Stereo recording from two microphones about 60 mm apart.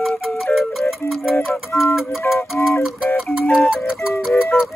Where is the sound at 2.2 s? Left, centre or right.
Left.